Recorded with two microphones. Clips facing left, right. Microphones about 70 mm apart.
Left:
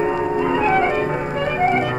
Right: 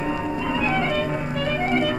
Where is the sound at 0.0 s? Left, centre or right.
Left.